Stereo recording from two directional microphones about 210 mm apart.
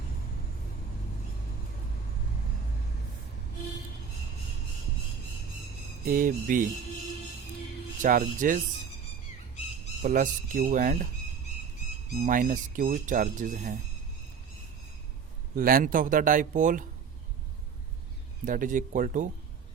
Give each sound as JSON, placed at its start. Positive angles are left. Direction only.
{"t": 6.1, "sound": "speech", "side_deg": -40}
{"t": 8.0, "sound": "speech", "side_deg": -40}
{"t": 10.0, "sound": "speech", "side_deg": -40}
{"t": 12.2, "sound": "speech", "side_deg": -40}
{"t": 15.5, "sound": "speech", "side_deg": -45}
{"t": 18.4, "sound": "speech", "side_deg": -40}